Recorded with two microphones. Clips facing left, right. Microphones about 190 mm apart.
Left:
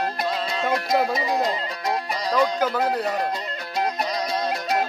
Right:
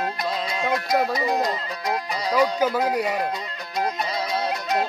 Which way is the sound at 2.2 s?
10° right (ahead or behind).